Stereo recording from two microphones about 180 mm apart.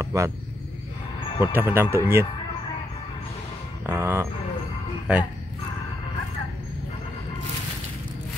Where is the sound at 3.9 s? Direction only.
15° right (ahead or behind).